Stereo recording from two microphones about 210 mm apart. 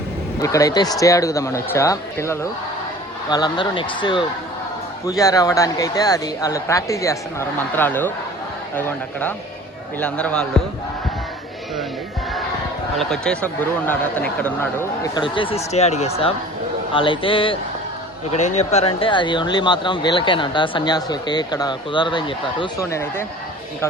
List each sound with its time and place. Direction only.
0.4 s speech: 15° left (ahead or behind)
10.0 s a man's voice: 5° left (ahead or behind)
13.0 s speech: 5° left (ahead or behind)